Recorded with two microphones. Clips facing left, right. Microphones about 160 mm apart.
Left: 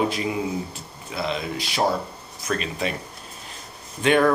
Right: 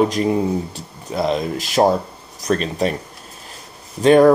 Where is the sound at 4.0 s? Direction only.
35° right (ahead or behind).